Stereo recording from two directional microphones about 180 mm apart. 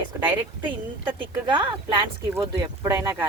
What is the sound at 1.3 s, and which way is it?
Speech, 25° right (ahead or behind).